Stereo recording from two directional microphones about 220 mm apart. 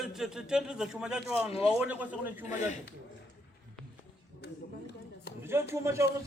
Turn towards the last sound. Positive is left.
turn(degrees=-10)  # may be behind; listen again after turning